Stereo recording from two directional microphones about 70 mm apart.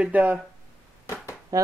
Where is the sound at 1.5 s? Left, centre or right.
Right.